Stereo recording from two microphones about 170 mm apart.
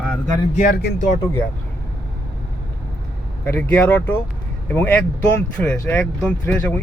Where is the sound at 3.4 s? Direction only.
10° left (ahead or behind).